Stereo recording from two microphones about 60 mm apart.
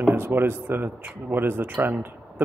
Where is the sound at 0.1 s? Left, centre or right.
Right.